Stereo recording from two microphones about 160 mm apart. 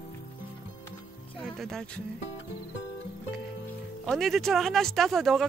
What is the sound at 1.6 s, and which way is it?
Speech, centre (ahead or behind).